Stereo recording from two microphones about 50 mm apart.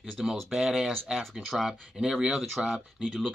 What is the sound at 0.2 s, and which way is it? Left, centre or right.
Speech, centre.